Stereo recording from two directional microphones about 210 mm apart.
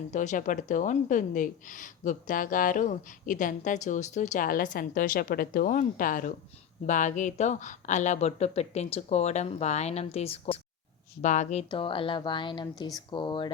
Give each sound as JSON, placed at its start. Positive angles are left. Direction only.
{"t": 0.1, "sound": "speech", "side_deg": 35}
{"t": 11.7, "sound": "speech", "side_deg": 25}